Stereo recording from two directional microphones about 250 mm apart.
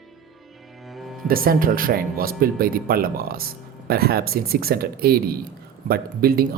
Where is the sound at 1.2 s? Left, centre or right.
Right.